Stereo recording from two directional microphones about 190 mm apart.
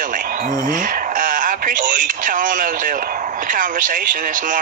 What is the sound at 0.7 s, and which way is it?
Radio, 45° right (ahead or behind).